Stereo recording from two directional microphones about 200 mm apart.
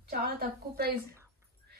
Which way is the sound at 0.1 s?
50° right (ahead or behind).